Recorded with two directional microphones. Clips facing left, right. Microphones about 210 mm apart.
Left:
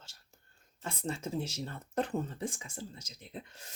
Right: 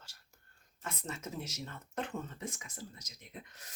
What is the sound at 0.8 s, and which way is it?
Speech, 30° left (ahead or behind).